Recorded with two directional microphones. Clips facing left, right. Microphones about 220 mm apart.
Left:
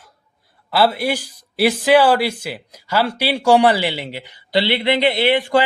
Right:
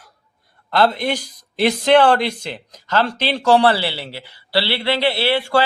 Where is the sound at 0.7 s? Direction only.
5° left (ahead or behind).